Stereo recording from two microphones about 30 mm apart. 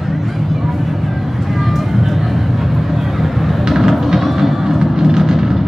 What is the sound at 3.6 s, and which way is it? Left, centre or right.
Music, centre.